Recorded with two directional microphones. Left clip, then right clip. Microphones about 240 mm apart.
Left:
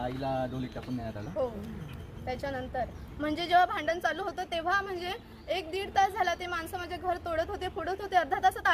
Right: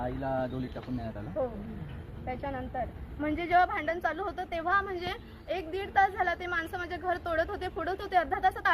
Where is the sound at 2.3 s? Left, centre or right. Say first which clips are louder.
Left 1 dB; centre.